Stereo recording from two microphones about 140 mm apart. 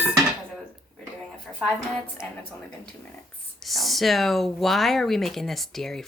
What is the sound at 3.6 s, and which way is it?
A woman's voice, centre (ahead or behind).